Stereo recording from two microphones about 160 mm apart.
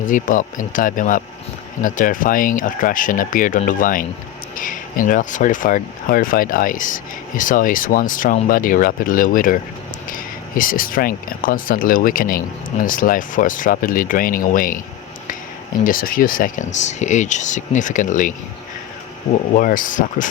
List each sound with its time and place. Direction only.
0.0 s speech: 55° left (ahead or behind)
10.6 s speech: 60° left (ahead or behind)
15.8 s speech: 60° left (ahead or behind)
19.5 s speech: 55° left (ahead or behind)